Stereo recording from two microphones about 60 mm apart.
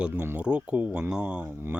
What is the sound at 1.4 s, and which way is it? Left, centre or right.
Speech, right.